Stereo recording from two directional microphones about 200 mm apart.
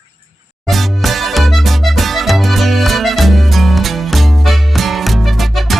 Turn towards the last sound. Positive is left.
turn(degrees=0)  # may be behind; listen again after turning